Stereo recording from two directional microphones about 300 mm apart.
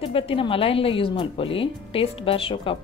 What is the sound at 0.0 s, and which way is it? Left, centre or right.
Speech, centre.